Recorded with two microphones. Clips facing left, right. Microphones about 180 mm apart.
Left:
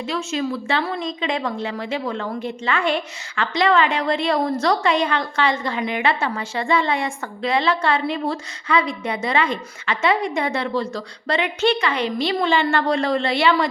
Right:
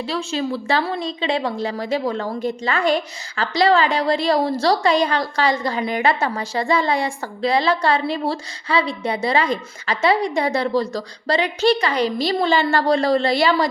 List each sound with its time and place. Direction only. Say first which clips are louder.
0.0 s speech: right 1 dB; 35° right (ahead or behind)